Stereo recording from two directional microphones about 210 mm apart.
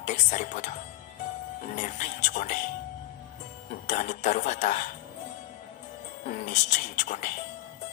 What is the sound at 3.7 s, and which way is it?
Speech, 35° left (ahead or behind).